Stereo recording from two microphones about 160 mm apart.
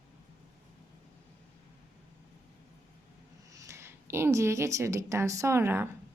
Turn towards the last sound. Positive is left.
turn(degrees=-15)  # may be behind; listen again after turning